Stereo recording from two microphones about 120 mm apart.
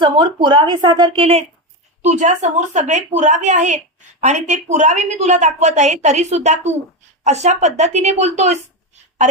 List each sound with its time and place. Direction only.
0.0 s speech: 45° right (ahead or behind)
1.2 s speech: 60° right (ahead or behind)
2.0 s a woman's voice: 80° right